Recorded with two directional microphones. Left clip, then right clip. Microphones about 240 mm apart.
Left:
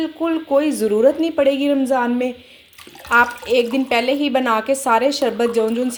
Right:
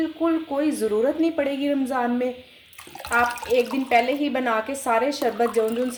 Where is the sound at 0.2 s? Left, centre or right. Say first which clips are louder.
Left 7 dB; left.